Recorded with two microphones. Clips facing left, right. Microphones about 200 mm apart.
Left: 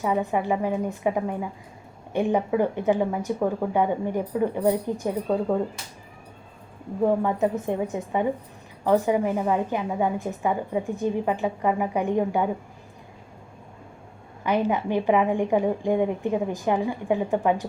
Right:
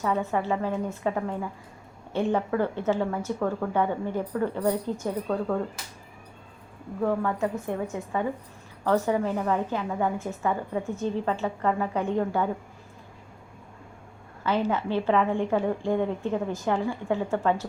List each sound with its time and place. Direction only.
0.0 s a woman's voice: 15° left (ahead or behind)
7.0 s a woman's voice: 20° left (ahead or behind)
14.4 s a woman's voice: 15° left (ahead or behind)